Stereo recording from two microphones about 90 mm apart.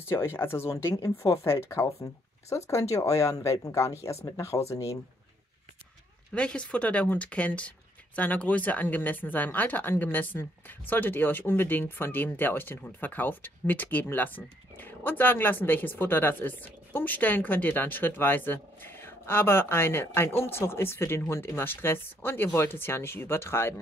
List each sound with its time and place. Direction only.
0.0 s speech: 30° left (ahead or behind)
6.3 s speech: 10° left (ahead or behind); by 23.7 s 30° left (ahead or behind)